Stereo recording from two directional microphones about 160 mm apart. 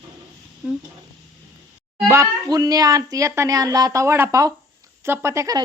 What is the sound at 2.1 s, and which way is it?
Speech, 20° right (ahead or behind).